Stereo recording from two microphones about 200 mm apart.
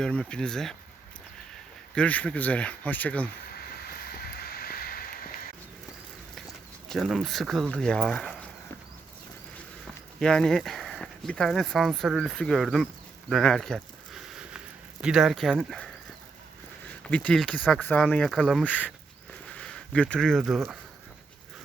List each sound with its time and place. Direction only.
0.0 s speech: 5° left (ahead or behind)
2.0 s speech: 5° left (ahead or behind)
3.5 s vehicle: 50° left (ahead or behind)
6.8 s speech: centre (ahead or behind)
10.2 s speech: 5° left (ahead or behind)
13.3 s a sound: 5° left (ahead or behind)
15.0 s speech: centre (ahead or behind)
16.9 s speech: 5° left (ahead or behind)